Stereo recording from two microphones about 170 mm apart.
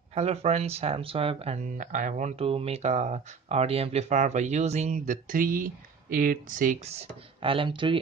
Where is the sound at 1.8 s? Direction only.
50° right (ahead or behind).